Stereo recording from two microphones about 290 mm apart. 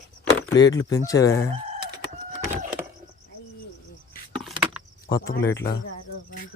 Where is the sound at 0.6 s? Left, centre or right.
Left.